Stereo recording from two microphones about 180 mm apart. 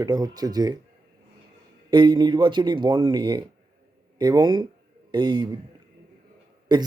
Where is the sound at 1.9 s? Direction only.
25° right (ahead or behind).